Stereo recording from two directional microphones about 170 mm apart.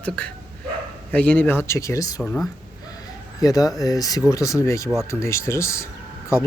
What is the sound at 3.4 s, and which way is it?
Speech, 20° left (ahead or behind).